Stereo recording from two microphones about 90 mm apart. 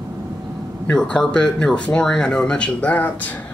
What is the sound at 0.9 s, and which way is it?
Speech, 5° left (ahead or behind).